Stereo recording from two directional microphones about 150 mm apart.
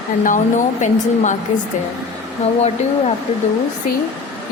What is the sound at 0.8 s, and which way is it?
Speech, 55° left (ahead or behind).